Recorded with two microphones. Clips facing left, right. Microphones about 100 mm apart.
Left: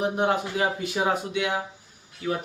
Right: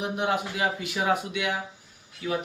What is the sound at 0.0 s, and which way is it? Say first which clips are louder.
Speech: left 3 dB; 35° left (ahead or behind).